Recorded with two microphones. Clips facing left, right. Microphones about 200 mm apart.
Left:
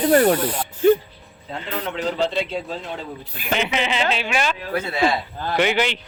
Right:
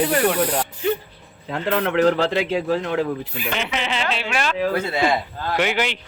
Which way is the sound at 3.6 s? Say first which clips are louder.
Left 4 dB; centre (ahead or behind).